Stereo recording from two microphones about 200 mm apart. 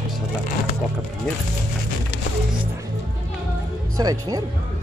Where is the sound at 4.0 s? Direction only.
20° right (ahead or behind).